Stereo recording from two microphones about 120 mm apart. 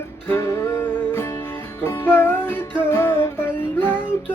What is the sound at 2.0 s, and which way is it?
Music, 15° left (ahead or behind).